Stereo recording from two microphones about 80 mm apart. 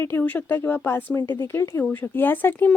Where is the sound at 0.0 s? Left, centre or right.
Left.